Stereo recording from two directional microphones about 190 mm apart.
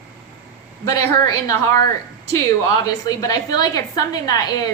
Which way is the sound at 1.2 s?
20° left (ahead or behind).